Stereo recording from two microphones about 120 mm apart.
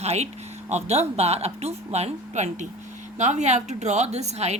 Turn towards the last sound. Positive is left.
turn(degrees=-65)  # may be behind; listen again after turning